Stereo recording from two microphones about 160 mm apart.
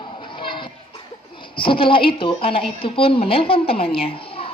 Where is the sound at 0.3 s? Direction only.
30° left (ahead or behind).